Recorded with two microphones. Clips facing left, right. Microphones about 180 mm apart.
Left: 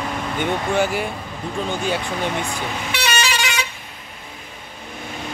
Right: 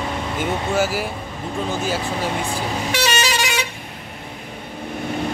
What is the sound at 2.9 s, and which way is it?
Vehicle, 40° right (ahead or behind).